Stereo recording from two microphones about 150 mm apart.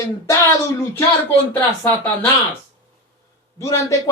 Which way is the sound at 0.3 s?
20° left (ahead or behind).